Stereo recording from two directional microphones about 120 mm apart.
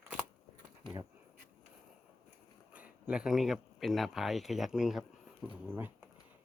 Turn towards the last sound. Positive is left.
turn(degrees=-20)  # may be behind; listen again after turning